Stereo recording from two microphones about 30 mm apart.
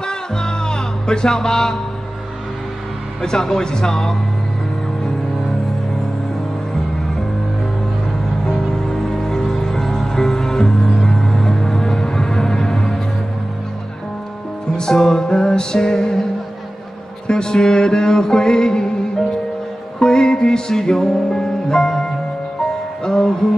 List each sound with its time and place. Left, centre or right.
0.0 s music: left
3.2 s music: left
8.5 s music: left
14.8 s music: left
17.3 s music: left